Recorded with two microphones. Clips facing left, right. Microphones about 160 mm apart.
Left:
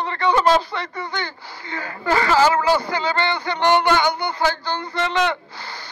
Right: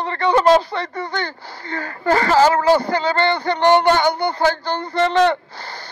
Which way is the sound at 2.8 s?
50° right (ahead or behind).